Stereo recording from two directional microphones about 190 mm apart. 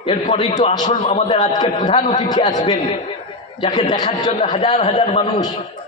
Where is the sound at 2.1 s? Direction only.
20° left (ahead or behind).